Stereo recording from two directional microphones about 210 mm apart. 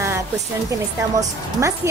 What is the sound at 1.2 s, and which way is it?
Speech, 15° right (ahead or behind).